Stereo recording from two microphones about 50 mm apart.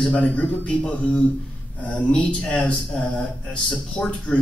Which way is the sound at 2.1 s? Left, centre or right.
Left.